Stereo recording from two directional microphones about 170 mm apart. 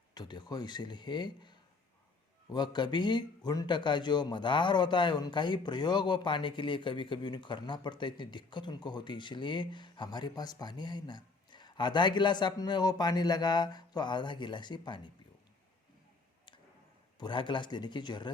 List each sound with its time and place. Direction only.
0.1 s a man's voice: 25° left (ahead or behind)
17.2 s a man's voice: 30° left (ahead or behind)